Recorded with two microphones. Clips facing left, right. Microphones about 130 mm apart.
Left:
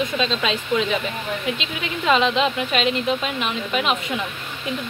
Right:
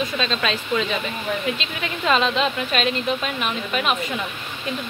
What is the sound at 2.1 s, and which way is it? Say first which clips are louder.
Speech: left 2 dB; 15° left (ahead or behind).